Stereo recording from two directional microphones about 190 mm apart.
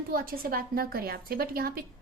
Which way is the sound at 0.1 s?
50° right (ahead or behind).